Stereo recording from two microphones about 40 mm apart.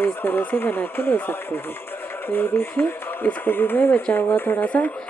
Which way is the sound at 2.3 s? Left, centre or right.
Left.